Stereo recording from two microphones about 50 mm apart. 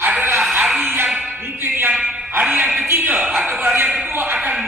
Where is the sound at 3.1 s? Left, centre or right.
Right.